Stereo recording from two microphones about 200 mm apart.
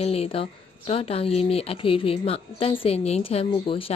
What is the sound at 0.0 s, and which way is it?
Speech, 30° left (ahead or behind).